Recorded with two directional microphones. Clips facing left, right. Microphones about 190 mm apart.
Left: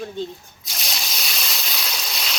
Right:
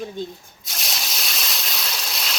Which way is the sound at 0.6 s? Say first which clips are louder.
Even; centre (ahead or behind).